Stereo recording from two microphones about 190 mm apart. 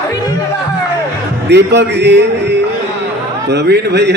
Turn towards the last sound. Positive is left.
turn(degrees=-60)  # may be behind; listen again after turning